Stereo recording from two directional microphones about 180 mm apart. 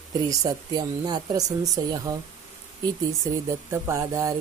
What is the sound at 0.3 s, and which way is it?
Speech, 20° right (ahead or behind).